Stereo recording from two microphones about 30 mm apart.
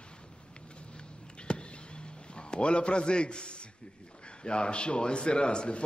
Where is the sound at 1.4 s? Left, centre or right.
Left.